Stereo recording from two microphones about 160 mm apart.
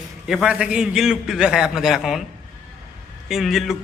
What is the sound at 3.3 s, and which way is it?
Speech, centre (ahead or behind).